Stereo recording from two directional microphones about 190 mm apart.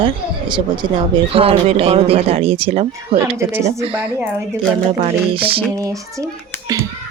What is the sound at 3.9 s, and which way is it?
Child singing, 5° right (ahead or behind).